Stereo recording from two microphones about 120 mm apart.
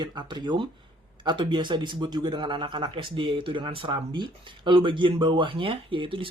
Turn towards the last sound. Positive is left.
turn(degrees=-45)  # may be behind; listen again after turning